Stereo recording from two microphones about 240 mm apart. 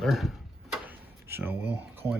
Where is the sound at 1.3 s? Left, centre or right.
Centre.